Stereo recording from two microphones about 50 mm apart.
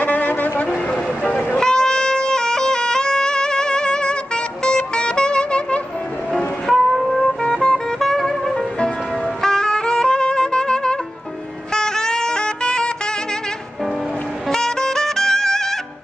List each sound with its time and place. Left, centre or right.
0.0 s brass instrument: left
1.2 s train: left
1.6 s music: centre
6.9 s music: centre
7.4 s music: centre
9.4 s saxophone: centre
11.7 s music: centre
14.5 s music: centre